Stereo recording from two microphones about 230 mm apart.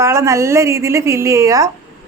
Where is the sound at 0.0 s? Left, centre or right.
Centre.